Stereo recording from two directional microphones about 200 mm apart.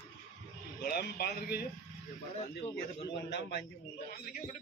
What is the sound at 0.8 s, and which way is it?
Speech, 50° left (ahead or behind).